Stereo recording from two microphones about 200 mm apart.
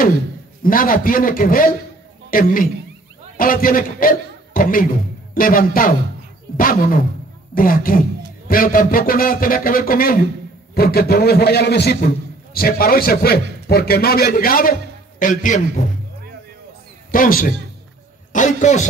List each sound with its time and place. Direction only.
0.7 s a man's voice: 45° left (ahead or behind)
17.1 s a man's voice: 45° left (ahead or behind)